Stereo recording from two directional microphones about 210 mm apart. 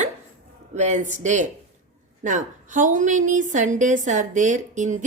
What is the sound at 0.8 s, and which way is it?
A woman's voice, 35° right (ahead or behind).